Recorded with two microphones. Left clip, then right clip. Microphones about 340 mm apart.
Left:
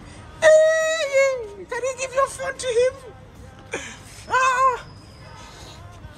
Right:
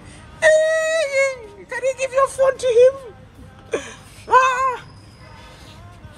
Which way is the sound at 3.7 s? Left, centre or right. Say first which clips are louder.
Right 6 dB; centre.